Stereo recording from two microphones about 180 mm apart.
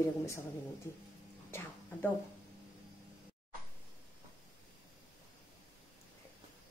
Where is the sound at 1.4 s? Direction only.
15° left (ahead or behind).